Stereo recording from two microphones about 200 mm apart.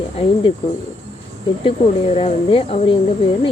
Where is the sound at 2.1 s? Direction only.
30° left (ahead or behind).